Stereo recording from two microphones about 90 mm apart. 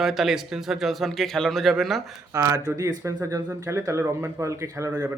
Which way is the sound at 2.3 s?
40° right (ahead or behind).